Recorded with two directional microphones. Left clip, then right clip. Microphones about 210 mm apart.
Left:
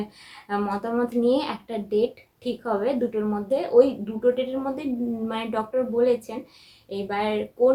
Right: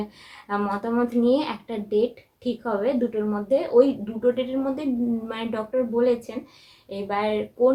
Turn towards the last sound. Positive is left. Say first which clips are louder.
# even
turn(degrees=0)  # may be behind; listen again after turning